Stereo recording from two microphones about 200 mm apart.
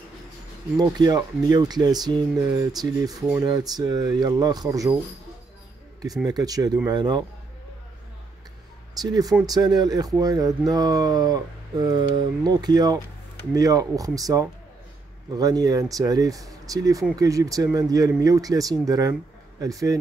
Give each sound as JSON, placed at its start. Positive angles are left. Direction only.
{"t": 0.7, "sound": "speech", "side_deg": -20}
{"t": 6.2, "sound": "speech", "side_deg": -20}
{"t": 9.0, "sound": "speech", "side_deg": -20}